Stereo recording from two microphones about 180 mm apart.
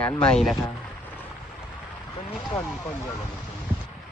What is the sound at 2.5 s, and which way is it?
Speech, 20° left (ahead or behind).